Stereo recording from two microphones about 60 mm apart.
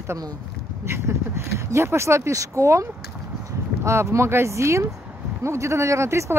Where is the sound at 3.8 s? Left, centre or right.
Right.